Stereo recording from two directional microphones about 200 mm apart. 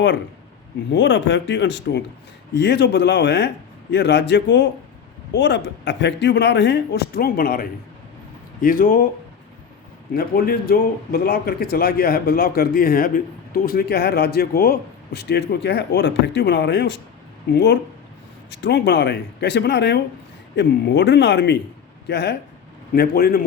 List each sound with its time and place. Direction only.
0.9 s speech: 65° left (ahead or behind); by 9.0 s 45° left (ahead or behind)
10.2 s speech: 50° left (ahead or behind)